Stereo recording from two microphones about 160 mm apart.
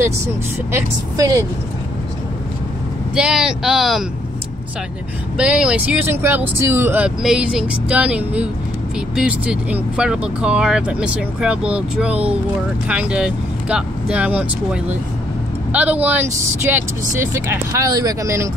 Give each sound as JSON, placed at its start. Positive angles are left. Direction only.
{"t": 0.7, "sound": "speech", "side_deg": -20}
{"t": 3.2, "sound": "speech", "side_deg": -5}
{"t": 5.4, "sound": "speech", "side_deg": -5}